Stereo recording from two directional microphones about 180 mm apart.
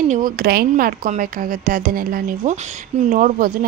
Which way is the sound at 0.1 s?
50° right (ahead or behind).